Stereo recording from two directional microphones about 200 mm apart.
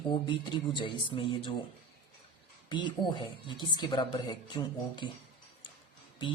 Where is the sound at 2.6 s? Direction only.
25° left (ahead or behind).